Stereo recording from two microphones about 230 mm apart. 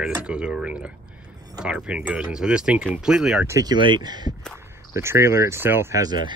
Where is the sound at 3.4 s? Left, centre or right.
Centre.